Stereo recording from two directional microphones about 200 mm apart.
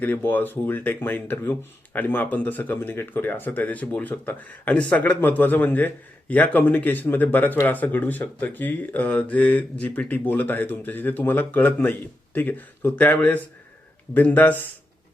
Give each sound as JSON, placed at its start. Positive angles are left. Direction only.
{"t": 0.0, "sound": "speech", "side_deg": 10}